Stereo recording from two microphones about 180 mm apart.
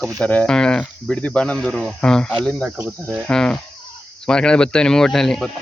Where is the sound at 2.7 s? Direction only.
10° right (ahead or behind).